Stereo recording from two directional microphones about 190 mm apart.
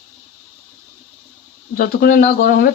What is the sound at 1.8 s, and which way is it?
Speech, 50° left (ahead or behind).